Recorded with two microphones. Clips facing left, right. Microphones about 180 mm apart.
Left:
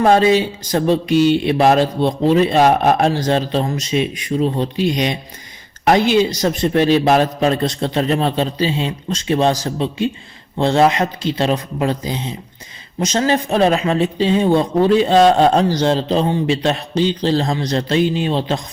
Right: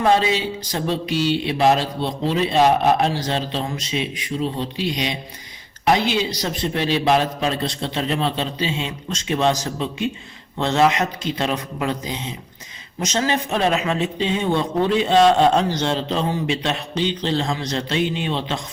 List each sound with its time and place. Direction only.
0.0 s speech: 45° left (ahead or behind)